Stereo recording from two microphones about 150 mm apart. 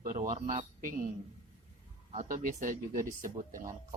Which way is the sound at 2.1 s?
50° right (ahead or behind).